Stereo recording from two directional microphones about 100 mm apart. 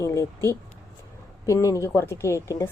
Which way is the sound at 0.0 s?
30° left (ahead or behind).